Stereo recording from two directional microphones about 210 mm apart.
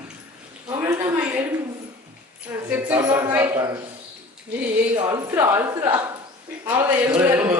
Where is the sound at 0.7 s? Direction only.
15° right (ahead or behind).